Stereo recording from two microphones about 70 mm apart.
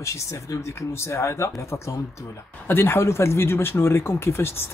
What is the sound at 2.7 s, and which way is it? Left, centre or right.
Speech, left.